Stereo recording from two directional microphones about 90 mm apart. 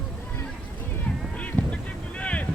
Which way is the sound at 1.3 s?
15° left (ahead or behind).